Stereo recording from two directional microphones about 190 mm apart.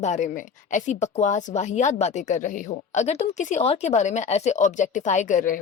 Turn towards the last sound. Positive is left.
turn(degrees=45)  # may be behind; listen again after turning